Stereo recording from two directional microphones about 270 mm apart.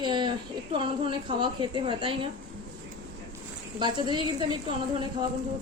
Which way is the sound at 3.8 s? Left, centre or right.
Centre.